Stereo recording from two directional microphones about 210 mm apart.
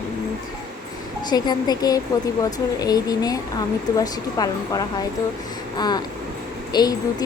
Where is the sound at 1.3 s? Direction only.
20° left (ahead or behind).